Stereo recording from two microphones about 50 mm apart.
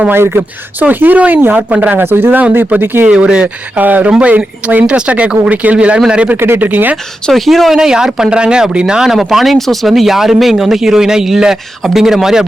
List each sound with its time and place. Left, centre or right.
0.1 s speech: right
2.0 s speech: right
2.4 s speech: right
3.1 s speech: centre
3.4 s speech: right
6.3 s speech: right
6.6 s speech: right
6.9 s speech: centre
7.8 s speech: centre